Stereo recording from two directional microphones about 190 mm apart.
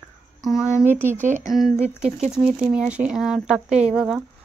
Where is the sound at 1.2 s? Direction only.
40° right (ahead or behind).